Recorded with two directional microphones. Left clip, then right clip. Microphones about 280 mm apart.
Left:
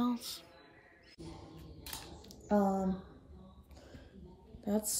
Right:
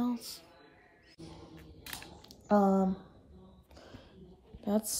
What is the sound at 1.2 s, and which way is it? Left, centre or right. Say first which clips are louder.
Music: even; centre.